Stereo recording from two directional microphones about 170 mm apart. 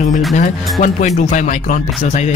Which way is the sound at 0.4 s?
45° left (ahead or behind).